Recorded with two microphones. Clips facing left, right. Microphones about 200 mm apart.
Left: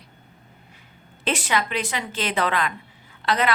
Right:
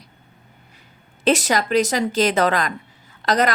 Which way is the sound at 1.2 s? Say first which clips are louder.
Right 6 dB; 40° right (ahead or behind).